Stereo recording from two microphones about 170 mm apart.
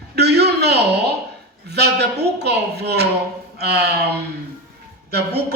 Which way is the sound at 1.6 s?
75° right (ahead or behind).